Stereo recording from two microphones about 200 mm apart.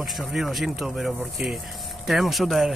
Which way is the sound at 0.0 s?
Centre (ahead or behind).